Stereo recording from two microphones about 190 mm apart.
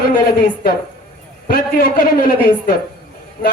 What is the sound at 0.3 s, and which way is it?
Speech, 55° left (ahead or behind).